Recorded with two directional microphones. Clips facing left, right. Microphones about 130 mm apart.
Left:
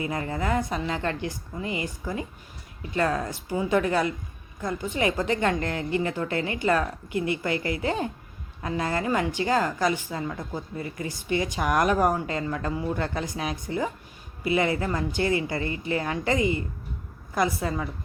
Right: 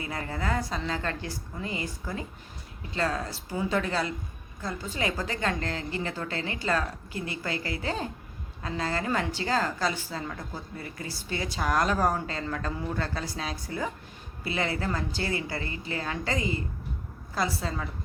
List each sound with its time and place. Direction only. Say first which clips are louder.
0.0 s a woman's voice: left 4 dB; 25° left (ahead or behind)